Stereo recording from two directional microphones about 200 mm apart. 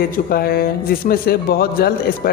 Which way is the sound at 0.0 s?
50° left (ahead or behind).